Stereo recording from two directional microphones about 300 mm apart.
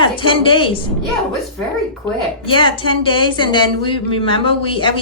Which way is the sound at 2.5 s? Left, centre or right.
Centre.